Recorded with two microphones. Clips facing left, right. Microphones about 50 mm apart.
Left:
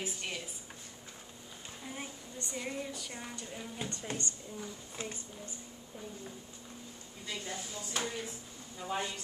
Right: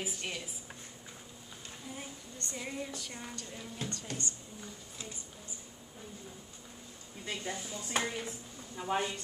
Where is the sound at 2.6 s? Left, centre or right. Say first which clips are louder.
Left 1 dB; centre.